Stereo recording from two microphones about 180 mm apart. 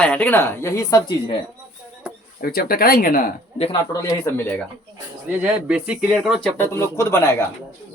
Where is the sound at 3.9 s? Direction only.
15° left (ahead or behind).